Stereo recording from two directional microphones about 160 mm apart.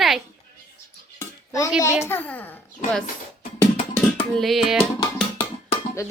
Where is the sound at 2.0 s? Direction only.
10° left (ahead or behind).